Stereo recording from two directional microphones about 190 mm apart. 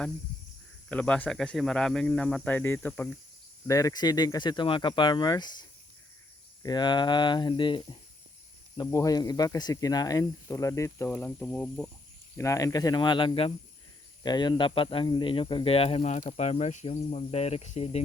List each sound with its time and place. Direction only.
0.9 s speech: 5° left (ahead or behind)
3.7 s speech: 20° left (ahead or behind)
12.4 s speech: 15° left (ahead or behind); by 18.0 s 35° left (ahead or behind)